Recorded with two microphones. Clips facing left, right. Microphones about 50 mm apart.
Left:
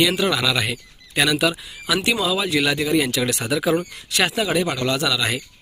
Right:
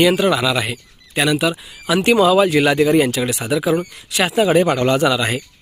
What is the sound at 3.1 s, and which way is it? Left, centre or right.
Speech, centre.